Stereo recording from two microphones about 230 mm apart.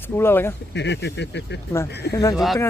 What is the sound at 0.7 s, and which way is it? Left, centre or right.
Speech, left.